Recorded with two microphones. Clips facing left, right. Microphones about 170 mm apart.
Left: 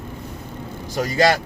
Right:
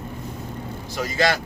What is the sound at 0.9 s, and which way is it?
Speech, 45° left (ahead or behind).